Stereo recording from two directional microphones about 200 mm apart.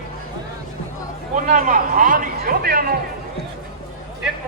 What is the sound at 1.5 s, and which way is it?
Speech, 45° right (ahead or behind).